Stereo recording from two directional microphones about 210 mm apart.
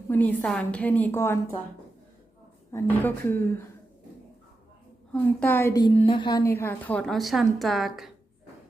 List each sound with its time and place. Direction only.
0.1 s a woman's voice: 10° left (ahead or behind)
2.7 s a woman's voice: 10° left (ahead or behind)
5.2 s a woman's voice: 10° left (ahead or behind)
6.6 s a woman's voice: 10° left (ahead or behind)